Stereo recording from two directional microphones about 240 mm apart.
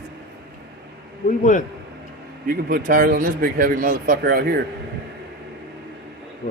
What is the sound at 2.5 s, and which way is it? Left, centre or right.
Speech, right.